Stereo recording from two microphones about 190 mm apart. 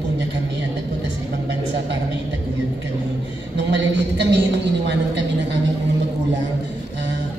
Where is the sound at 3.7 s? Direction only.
65° right (ahead or behind).